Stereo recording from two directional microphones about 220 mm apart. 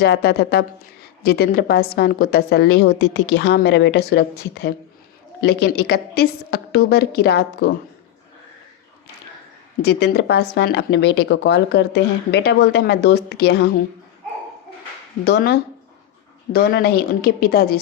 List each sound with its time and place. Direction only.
0.0 s speech: 50° left (ahead or behind)
9.8 s speech: 50° left (ahead or behind)
15.2 s speech: 45° left (ahead or behind)